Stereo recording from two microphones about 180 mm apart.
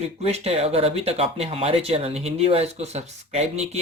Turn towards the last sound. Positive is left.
turn(degrees=-35)  # may be behind; listen again after turning